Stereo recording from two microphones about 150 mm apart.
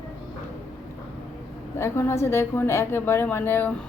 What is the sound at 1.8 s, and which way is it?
A woman's voice, 15° left (ahead or behind).